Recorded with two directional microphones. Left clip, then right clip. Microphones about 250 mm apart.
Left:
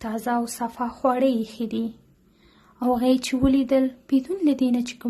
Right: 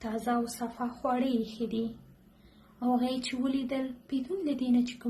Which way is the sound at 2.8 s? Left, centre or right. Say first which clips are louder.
Left 9 dB; left.